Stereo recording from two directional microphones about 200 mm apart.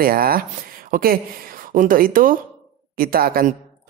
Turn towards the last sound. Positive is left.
turn(degrees=-45)  # may be behind; listen again after turning